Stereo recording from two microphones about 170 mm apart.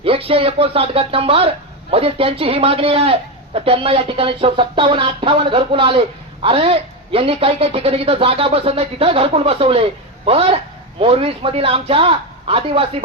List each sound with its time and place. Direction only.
0.0 s speech: 35° right (ahead or behind)